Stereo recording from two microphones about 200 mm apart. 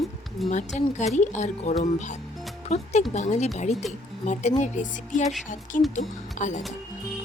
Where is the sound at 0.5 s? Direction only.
35° left (ahead or behind).